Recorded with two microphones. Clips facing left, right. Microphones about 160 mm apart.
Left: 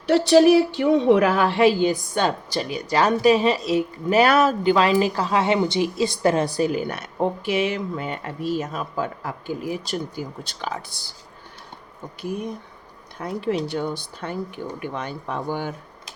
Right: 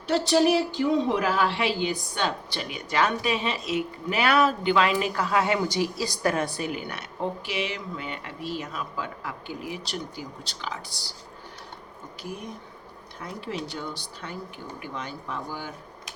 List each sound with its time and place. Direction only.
0.1 s speech: 65° left (ahead or behind)
13.2 s speech: 60° left (ahead or behind)